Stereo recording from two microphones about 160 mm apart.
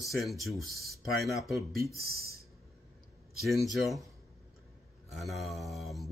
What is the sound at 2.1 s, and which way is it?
Speech, 75° right (ahead or behind).